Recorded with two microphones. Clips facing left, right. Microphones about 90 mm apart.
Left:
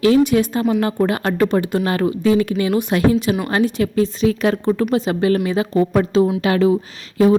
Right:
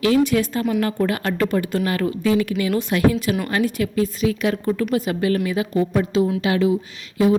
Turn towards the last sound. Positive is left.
turn(degrees=40)  # may be behind; listen again after turning